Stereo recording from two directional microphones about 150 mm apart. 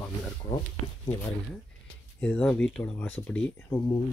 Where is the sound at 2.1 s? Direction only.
10° left (ahead or behind).